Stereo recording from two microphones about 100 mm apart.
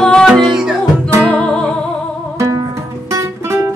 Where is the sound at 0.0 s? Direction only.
5° left (ahead or behind).